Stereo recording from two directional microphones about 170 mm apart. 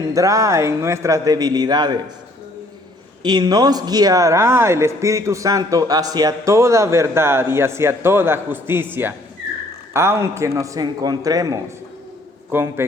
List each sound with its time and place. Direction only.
0.1 s a man's voice: 20° right (ahead or behind)
3.2 s a man's voice: 25° right (ahead or behind)